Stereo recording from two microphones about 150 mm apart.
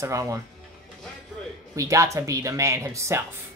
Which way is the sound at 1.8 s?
20° right (ahead or behind).